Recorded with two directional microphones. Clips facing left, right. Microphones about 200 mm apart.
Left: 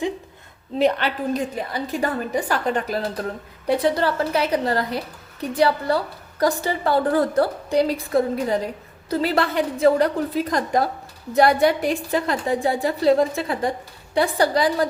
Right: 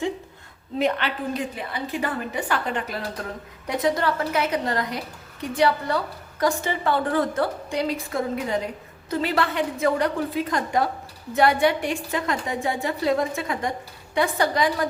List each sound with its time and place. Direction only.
0.8 s a woman's voice: 35° left (ahead or behind)